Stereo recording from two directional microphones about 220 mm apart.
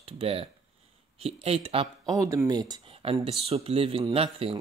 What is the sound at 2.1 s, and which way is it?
Speech, 15° right (ahead or behind).